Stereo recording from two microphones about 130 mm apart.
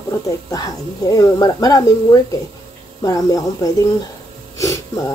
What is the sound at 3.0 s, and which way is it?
Speech, 25° left (ahead or behind).